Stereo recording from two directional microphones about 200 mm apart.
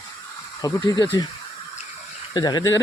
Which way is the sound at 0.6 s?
20° left (ahead or behind).